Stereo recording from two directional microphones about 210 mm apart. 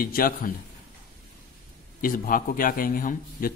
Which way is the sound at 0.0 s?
45° left (ahead or behind).